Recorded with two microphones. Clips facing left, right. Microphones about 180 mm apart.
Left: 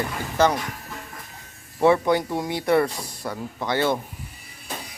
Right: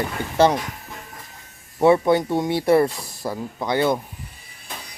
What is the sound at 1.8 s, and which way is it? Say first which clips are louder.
Speech: right 3 dB; 25° right (ahead or behind).